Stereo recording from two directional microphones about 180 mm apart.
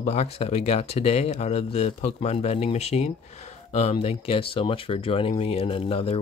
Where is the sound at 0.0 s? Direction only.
40° left (ahead or behind).